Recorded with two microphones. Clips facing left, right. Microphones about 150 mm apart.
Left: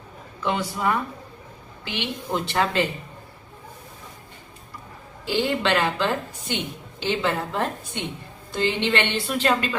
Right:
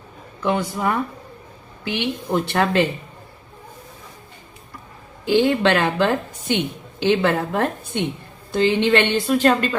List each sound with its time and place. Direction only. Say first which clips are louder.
0.4 s speech: right 3 dB; 5° right (ahead or behind)
1.8 s a woman's voice: right 6 dB; 50° right (ahead or behind)
5.2 s a woman's voice: right 7 dB; 55° right (ahead or behind)